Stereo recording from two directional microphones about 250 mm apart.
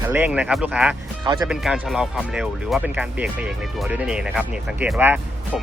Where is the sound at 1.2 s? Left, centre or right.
Centre.